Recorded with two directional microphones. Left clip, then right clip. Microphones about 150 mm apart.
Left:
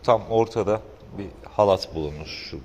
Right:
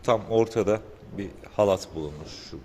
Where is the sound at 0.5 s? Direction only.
30° right (ahead or behind).